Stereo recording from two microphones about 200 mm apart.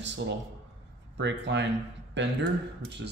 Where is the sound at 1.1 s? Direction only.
60° right (ahead or behind).